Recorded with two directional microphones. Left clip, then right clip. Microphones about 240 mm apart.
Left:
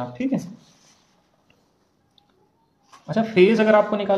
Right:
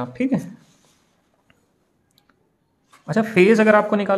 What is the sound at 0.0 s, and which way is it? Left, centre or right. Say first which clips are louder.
Speech: right 3 dB; right.